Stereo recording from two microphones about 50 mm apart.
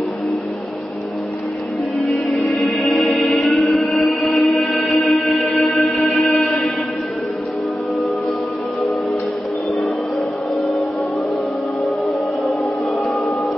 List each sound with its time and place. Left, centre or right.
2.0 s music: centre